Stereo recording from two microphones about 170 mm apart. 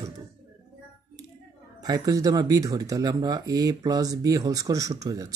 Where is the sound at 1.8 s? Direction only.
20° right (ahead or behind).